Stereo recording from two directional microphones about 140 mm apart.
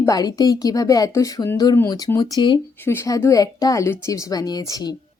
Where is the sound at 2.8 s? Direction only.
20° left (ahead or behind).